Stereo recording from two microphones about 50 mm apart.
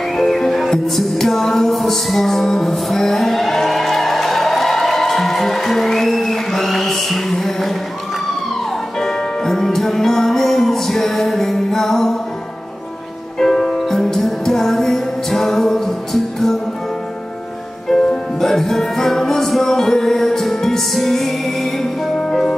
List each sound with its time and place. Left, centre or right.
0.1 s music: centre
9.0 s music: centre
13.4 s music: centre
18.1 s music: centre